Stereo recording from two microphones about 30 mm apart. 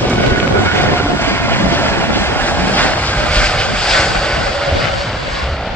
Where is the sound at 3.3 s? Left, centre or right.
Left.